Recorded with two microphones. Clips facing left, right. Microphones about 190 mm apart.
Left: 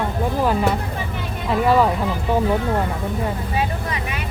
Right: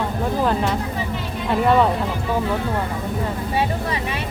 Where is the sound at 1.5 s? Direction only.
5° left (ahead or behind).